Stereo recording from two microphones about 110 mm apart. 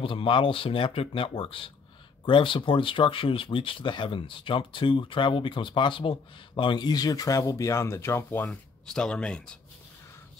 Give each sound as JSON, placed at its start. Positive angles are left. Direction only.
{"t": 0.0, "sound": "speech", "side_deg": 50}
{"t": 8.5, "sound": "speech", "side_deg": 5}